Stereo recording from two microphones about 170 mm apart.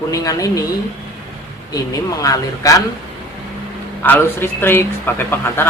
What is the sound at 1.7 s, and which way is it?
Speech, 20° left (ahead or behind).